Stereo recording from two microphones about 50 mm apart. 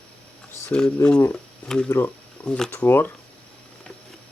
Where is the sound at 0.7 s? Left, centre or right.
Left.